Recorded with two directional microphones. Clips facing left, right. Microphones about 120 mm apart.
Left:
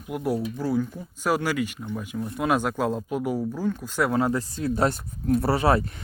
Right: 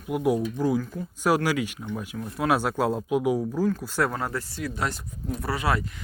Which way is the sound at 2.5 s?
5° right (ahead or behind).